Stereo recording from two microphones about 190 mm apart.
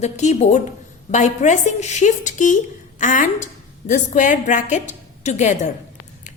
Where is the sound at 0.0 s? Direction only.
35° left (ahead or behind).